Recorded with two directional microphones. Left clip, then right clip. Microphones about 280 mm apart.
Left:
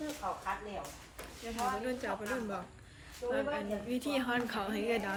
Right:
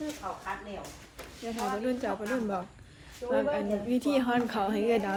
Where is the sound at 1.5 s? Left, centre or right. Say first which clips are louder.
Right 4 dB; centre.